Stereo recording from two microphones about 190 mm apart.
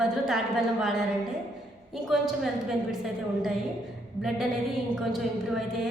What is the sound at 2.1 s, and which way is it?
Speech, centre (ahead or behind).